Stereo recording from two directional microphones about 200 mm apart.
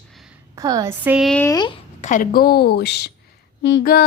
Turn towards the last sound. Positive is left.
turn(degrees=55)  # may be behind; listen again after turning